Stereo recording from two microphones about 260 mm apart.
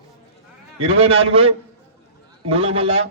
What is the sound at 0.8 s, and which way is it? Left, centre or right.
A man's voice, right.